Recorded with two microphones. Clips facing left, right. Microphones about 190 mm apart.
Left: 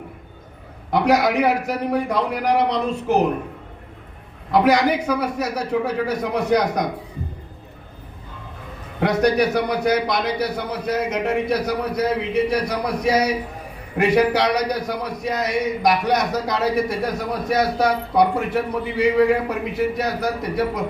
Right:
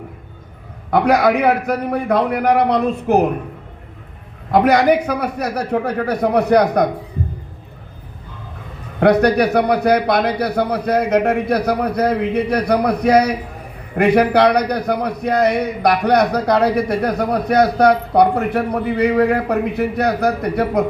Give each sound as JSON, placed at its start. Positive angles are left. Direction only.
{"t": 0.9, "sound": "a man's voice", "side_deg": -55}
{"t": 4.5, "sound": "a man's voice", "side_deg": -60}
{"t": 9.0, "sound": "a man's voice", "side_deg": -60}